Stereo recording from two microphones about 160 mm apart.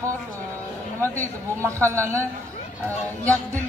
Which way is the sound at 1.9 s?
15° right (ahead or behind).